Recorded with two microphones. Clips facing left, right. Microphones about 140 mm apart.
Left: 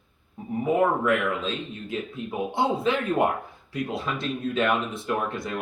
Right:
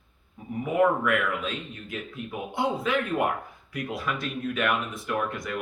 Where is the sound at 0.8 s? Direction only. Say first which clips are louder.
Right 2 dB; 25° left (ahead or behind).